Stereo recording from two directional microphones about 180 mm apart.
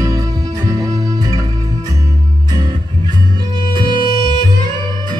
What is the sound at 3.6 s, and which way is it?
Music, 25° right (ahead or behind).